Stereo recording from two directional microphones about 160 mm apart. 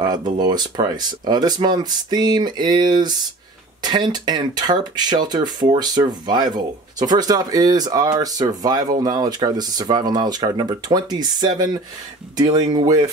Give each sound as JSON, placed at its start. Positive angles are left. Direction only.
{"t": 0.0, "sound": "speech", "side_deg": -25}